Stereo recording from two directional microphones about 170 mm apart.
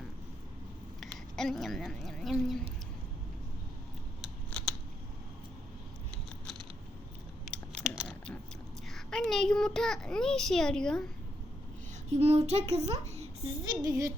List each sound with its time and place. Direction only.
1.4 s a child's voice: centre (ahead or behind)
7.5 s a sound: 5° left (ahead or behind)
8.9 s a child's voice: 5° left (ahead or behind)
12.0 s a child's voice: 40° right (ahead or behind)
13.7 s speech: 20° right (ahead or behind)